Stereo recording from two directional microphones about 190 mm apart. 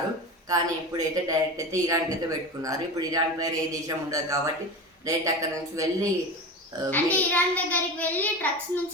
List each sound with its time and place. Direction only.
0.4 s speech: 20° right (ahead or behind)
6.9 s a child's voice: 10° left (ahead or behind)